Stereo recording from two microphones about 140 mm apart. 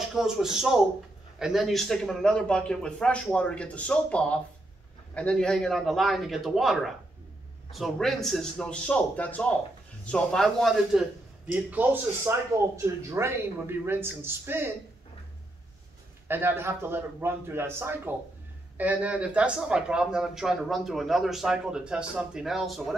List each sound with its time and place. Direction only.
0.1 s a man's voice: 5° right (ahead or behind)
11.5 s a man's voice: 15° right (ahead or behind)
16.3 s a man's voice: 15° right (ahead or behind)